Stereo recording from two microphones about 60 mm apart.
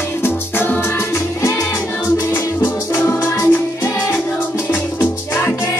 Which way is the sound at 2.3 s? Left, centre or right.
Left.